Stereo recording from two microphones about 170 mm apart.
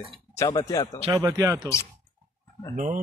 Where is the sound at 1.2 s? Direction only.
15° right (ahead or behind).